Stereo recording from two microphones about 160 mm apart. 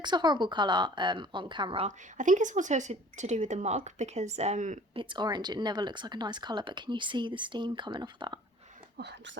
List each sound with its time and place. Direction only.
0.0 s speech: 25° right (ahead or behind)
2.1 s speech: 50° right (ahead or behind)
4.9 s speech: 30° right (ahead or behind)
9.0 s speech: 90° right